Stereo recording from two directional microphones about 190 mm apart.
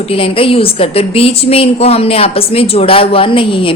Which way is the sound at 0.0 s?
30° left (ahead or behind).